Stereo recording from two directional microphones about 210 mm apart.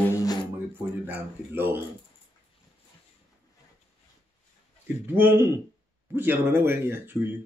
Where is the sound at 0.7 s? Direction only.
10° right (ahead or behind).